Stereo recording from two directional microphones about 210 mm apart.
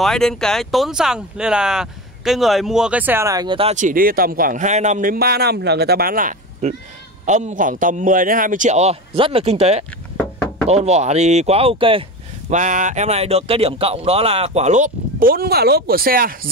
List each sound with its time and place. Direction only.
0.0 s speech: centre (ahead or behind); by 16.3 s 45° right (ahead or behind)